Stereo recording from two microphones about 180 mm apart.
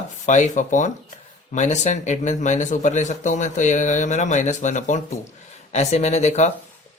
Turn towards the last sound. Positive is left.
turn(degrees=40)  # may be behind; listen again after turning